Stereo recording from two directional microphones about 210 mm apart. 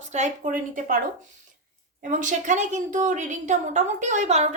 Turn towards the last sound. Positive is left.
turn(degrees=-35)  # may be behind; listen again after turning